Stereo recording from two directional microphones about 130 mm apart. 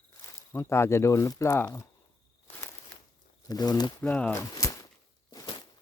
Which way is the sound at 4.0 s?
10° left (ahead or behind).